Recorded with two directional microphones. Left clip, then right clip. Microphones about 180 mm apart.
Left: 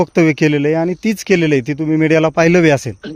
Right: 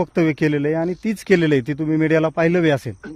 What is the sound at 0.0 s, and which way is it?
Speech, 20° left (ahead or behind).